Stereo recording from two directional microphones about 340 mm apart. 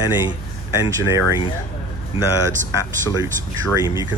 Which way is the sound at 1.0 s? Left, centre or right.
Centre.